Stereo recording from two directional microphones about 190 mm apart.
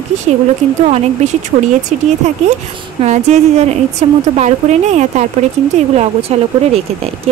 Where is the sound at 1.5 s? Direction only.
40° right (ahead or behind).